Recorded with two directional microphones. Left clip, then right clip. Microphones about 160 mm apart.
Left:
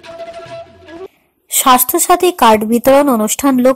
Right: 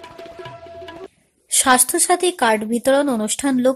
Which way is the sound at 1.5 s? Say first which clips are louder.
Left 6 dB; 10° left (ahead or behind).